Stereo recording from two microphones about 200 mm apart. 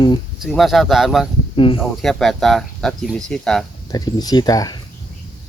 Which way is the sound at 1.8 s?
Centre (ahead or behind).